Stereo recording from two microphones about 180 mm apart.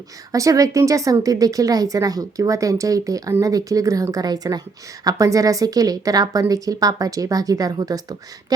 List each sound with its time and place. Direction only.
0.3 s a woman's voice: 20° right (ahead or behind)